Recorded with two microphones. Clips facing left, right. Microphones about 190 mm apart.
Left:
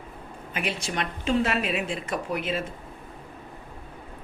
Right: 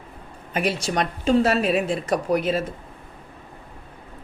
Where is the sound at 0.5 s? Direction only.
40° right (ahead or behind).